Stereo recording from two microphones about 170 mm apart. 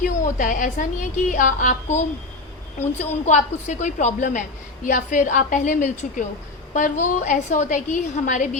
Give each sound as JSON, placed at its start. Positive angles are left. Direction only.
{"t": 0.0, "sound": "a woman's voice", "side_deg": 50}